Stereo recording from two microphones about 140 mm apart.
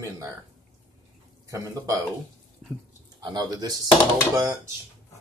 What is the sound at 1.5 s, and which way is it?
Speech, 25° right (ahead or behind).